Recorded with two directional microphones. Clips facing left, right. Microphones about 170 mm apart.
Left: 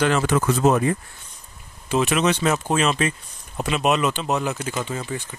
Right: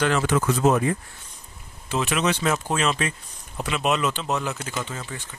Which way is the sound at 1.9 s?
20° left (ahead or behind).